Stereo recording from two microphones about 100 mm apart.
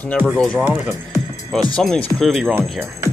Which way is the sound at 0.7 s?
20° right (ahead or behind).